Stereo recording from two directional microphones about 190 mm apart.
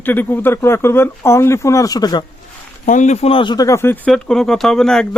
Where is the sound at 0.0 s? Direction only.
10° left (ahead or behind).